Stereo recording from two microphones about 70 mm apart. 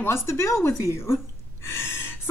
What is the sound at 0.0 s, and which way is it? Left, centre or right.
A woman's voice, left.